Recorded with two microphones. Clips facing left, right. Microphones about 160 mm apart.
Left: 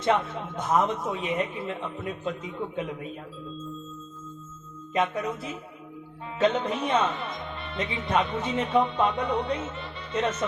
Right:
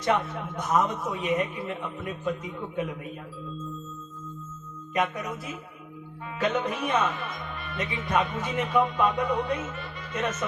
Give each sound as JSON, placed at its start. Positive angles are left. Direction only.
{"t": 0.0, "sound": "speech", "side_deg": 25}
{"t": 4.9, "sound": "speech", "side_deg": 25}